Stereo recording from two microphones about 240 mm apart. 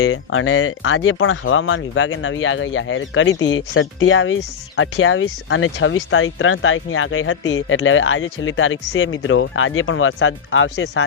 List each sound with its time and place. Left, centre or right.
0.0 s speech: left